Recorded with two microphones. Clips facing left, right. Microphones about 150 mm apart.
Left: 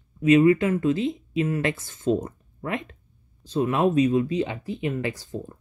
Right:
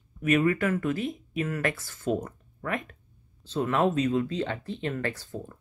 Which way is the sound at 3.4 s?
15° left (ahead or behind).